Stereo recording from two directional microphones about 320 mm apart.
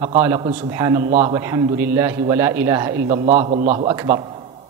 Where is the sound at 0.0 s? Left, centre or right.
Centre.